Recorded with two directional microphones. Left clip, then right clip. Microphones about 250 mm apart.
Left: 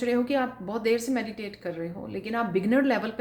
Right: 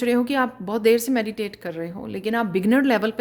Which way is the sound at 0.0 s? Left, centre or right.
Right.